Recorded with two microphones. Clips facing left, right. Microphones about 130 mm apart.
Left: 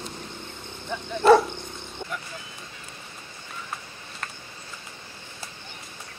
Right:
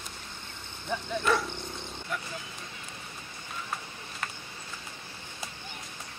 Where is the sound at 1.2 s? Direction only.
30° left (ahead or behind).